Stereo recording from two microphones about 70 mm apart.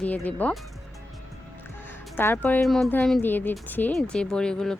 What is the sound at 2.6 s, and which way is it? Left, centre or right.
Speech, centre.